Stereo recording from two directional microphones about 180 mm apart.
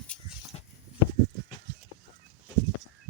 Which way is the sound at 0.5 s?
35° left (ahead or behind).